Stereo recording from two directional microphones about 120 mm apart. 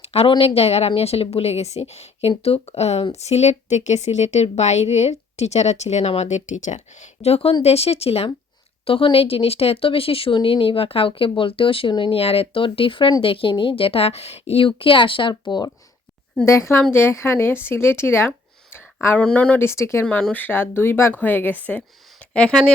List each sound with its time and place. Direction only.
0.0 s speech: 55° left (ahead or behind); by 15.7 s 35° left (ahead or behind)
16.5 s speech: 25° left (ahead or behind)
20.1 s speech: 10° left (ahead or behind)